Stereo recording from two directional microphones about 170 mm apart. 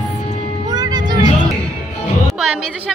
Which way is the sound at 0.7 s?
25° right (ahead or behind).